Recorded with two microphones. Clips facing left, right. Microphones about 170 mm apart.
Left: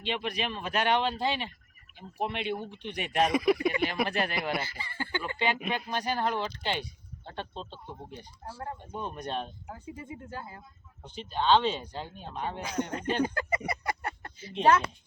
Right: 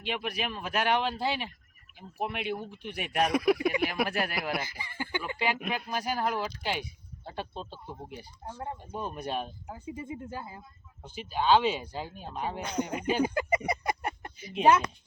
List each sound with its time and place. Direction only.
0.0 s speech: 5° right (ahead or behind)
4.6 s speech: 15° right (ahead or behind)
13.7 s a sound: 15° right (ahead or behind)